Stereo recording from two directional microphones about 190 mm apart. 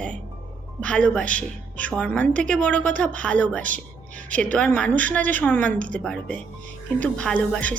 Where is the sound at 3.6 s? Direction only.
45° right (ahead or behind).